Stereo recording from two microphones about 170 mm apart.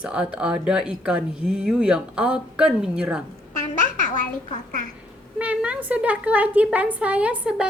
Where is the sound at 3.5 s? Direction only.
50° left (ahead or behind).